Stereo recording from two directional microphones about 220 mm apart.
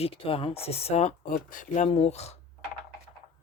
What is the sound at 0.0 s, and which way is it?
Speech, 25° left (ahead or behind).